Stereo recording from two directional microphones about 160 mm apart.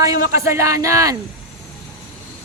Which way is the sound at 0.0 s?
20° right (ahead or behind).